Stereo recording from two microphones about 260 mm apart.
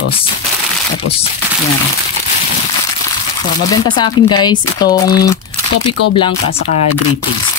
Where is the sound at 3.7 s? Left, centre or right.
Centre.